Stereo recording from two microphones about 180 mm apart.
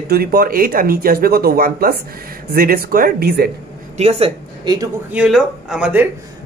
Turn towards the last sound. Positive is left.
turn(degrees=-10)  # may be behind; listen again after turning